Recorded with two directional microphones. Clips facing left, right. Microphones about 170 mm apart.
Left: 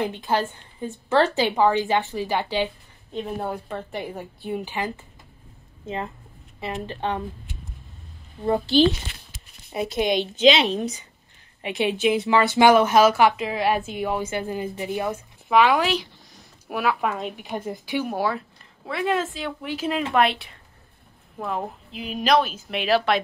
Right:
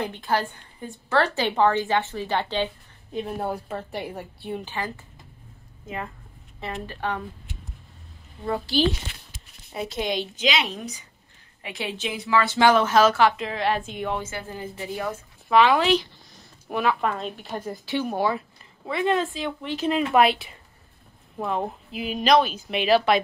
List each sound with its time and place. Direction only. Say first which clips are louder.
0.0 s a woman's voice: left 2 dB; 20° left (ahead or behind)
3.3 s a woman's voice: even; 5° right (ahead or behind); by 4.9 s 15° left (ahead or behind)
6.6 s a woman's voice: left 2 dB; 20° left (ahead or behind)
9.7 s a woman's voice: left 5 dB; 15° left (ahead or behind)
20.2 s a woman's voice: right 2 dB; 5° right (ahead or behind)